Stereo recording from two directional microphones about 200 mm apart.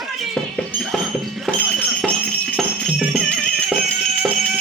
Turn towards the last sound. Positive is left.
turn(degrees=0)  # may be behind; listen again after turning